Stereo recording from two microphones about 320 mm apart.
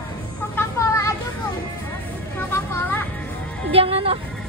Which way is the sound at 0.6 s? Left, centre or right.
Centre.